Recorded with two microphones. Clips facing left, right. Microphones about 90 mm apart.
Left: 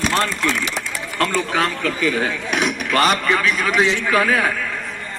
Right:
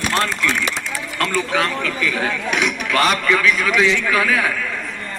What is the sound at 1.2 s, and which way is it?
Speech, 35° left (ahead or behind).